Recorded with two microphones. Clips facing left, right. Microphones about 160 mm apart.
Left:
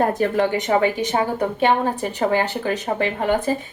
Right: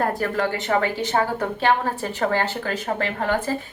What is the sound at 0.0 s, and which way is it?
A woman's voice, 20° left (ahead or behind).